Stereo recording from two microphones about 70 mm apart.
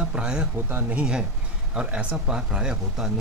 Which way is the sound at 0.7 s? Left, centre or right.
Right.